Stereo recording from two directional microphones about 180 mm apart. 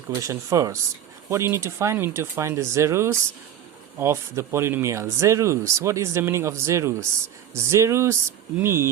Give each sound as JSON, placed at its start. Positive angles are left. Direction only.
{"t": 0.1, "sound": "speech", "side_deg": -15}